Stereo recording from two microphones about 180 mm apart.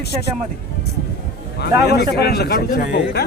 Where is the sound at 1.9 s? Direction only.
65° left (ahead or behind).